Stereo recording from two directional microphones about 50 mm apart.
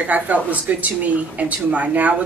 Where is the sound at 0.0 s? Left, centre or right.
Right.